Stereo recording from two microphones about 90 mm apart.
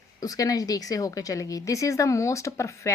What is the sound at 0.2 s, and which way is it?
Speech, 40° left (ahead or behind).